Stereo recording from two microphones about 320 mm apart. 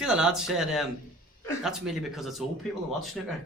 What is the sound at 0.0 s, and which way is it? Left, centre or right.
Speech, centre.